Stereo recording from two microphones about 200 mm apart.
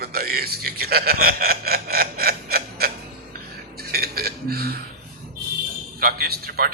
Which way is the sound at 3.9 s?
50° right (ahead or behind).